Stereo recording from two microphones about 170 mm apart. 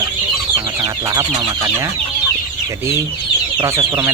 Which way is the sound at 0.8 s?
20° right (ahead or behind).